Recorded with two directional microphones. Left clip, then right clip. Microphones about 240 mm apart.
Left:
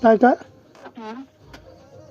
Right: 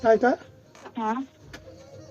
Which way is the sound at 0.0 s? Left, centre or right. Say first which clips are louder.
Left 5 dB; left.